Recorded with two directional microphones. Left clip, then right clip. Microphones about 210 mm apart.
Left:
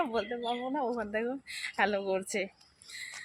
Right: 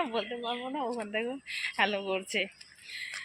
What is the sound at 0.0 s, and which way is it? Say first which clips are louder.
Speech: left 1 dB; 10° left (ahead or behind).